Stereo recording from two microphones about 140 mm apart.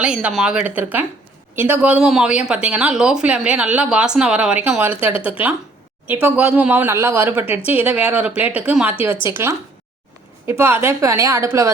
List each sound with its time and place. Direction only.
0.0 s a woman's voice: 5° right (ahead or behind)
6.1 s a woman's voice: 10° right (ahead or behind)
10.6 s a woman's voice: 15° right (ahead or behind)